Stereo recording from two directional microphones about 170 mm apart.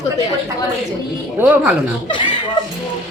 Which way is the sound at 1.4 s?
10° right (ahead or behind).